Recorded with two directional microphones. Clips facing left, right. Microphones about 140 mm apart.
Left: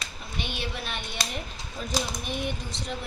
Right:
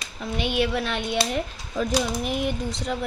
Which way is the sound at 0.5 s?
90° right.